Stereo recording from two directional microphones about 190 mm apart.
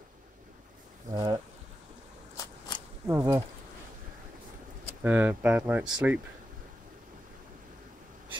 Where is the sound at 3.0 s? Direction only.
15° right (ahead or behind).